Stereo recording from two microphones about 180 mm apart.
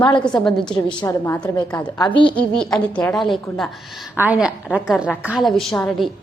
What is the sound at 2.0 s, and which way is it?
Speech, 25° left (ahead or behind).